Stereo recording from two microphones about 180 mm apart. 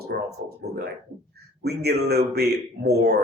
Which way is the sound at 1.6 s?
60° right (ahead or behind).